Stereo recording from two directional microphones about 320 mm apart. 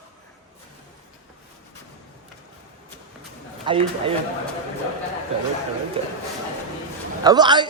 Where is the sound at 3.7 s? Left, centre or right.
Centre.